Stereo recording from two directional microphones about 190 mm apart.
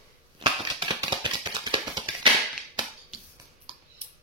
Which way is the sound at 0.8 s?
25° right (ahead or behind).